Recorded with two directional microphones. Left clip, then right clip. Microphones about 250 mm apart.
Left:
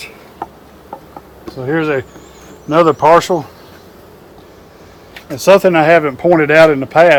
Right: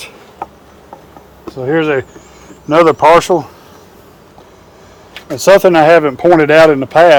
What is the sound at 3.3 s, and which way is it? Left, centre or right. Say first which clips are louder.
Speech: right 4 dB; right.